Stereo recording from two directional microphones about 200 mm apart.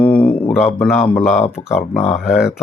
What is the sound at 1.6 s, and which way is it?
Speech, 35° left (ahead or behind).